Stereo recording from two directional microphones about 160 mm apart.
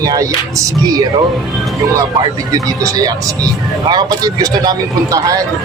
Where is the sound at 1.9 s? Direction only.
20° right (ahead or behind).